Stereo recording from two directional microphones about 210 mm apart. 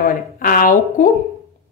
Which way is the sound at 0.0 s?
40° left (ahead or behind).